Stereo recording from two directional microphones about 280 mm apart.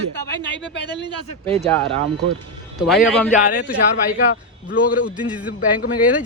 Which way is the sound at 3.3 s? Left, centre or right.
Left.